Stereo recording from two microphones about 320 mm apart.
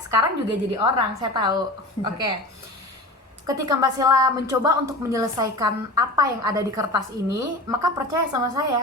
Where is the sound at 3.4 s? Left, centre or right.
Centre.